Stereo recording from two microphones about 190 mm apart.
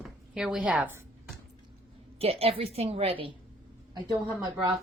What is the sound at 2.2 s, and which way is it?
A woman's voice, 30° right (ahead or behind).